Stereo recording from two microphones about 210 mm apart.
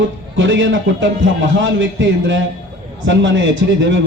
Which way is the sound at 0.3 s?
65° right (ahead or behind).